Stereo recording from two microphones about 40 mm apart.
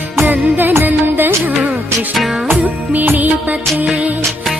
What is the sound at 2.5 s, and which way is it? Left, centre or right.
Music, right.